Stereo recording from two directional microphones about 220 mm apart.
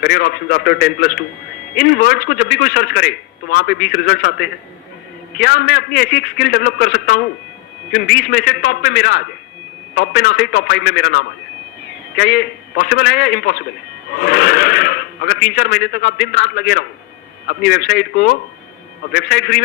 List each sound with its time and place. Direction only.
0.0 s a man's voice: 45° left (ahead or behind)